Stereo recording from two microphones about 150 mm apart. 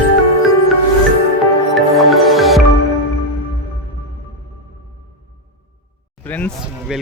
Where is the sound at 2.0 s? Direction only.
Centre (ahead or behind).